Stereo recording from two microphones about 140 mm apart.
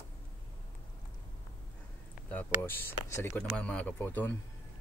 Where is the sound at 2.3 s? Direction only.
15° left (ahead or behind).